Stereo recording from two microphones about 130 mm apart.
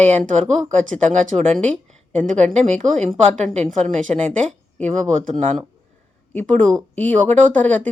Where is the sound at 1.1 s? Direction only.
60° right (ahead or behind).